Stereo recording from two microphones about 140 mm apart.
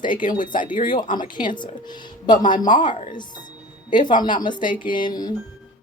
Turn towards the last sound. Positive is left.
turn(degrees=30)  # may be behind; listen again after turning